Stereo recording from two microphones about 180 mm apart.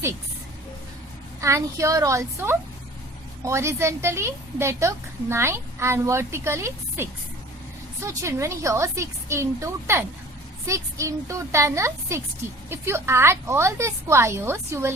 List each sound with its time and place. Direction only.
1.4 s a woman's voice: 15° right (ahead or behind)